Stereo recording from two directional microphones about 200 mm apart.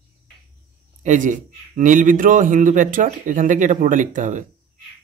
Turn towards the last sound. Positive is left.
turn(degrees=-40)  # may be behind; listen again after turning